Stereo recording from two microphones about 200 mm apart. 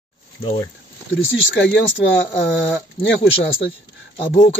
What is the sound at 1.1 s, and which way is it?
Speech, 65° left (ahead or behind).